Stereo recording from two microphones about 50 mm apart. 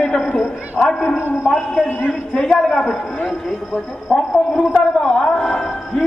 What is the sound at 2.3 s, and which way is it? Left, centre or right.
Speech, centre.